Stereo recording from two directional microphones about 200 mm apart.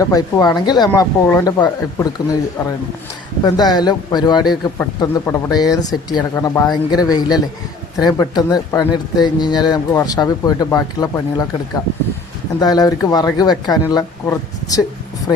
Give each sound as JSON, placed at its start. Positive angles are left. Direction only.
{"t": 0.0, "sound": "a man's voice", "side_deg": 15}
{"t": 3.4, "sound": "a man's voice", "side_deg": 20}
{"t": 12.5, "sound": "a man's voice", "side_deg": 20}